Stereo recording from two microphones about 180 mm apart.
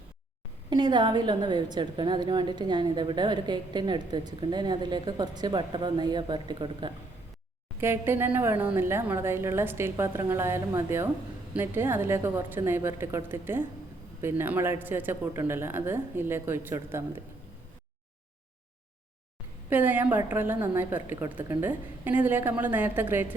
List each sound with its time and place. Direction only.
0.7 s a woman's voice: 25° right (ahead or behind)
7.8 s speech: 10° right (ahead or behind)
19.7 s speech: 10° right (ahead or behind)